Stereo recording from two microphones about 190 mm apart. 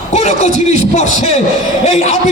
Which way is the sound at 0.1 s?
35° left (ahead or behind).